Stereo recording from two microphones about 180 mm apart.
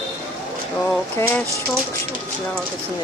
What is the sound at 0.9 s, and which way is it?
Speech, 10° left (ahead or behind).